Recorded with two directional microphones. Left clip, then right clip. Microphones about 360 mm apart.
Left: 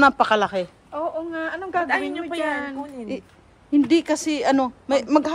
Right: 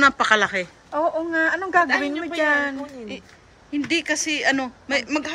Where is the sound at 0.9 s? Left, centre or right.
Right.